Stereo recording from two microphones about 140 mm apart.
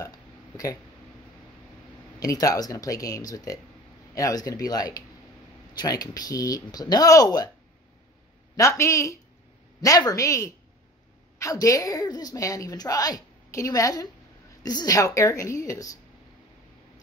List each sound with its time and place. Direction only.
0.0 s burping: 25° left (ahead or behind)
2.1 s a woman's voice: 25° left (ahead or behind)
8.5 s a woman's voice: 20° left (ahead or behind)